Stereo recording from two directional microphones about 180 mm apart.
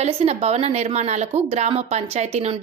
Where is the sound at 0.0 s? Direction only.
35° right (ahead or behind).